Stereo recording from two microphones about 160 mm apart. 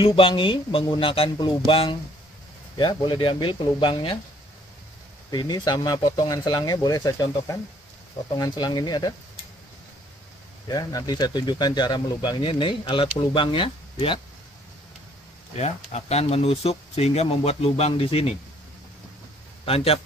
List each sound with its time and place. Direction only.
0.0 s speech: 35° left (ahead or behind)
5.3 s speech: 25° left (ahead or behind)
10.7 s speech: 25° left (ahead or behind)
15.5 s speech: 45° left (ahead or behind)
19.6 s a man's voice: 35° left (ahead or behind)